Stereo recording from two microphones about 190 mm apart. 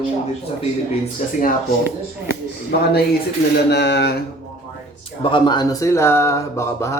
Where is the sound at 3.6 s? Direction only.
65° left (ahead or behind).